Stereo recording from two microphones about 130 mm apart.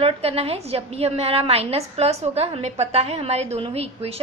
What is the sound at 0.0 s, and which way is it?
A woman's voice, 50° right (ahead or behind).